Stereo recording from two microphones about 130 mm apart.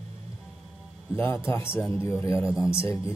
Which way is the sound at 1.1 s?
15° left (ahead or behind).